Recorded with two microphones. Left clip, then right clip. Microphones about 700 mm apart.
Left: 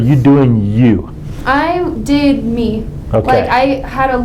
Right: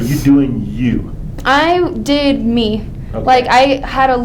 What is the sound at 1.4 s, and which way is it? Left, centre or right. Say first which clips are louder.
A woman's voice: right 2 dB; right.